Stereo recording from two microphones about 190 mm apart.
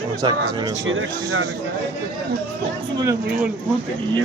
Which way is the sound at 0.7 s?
90° right.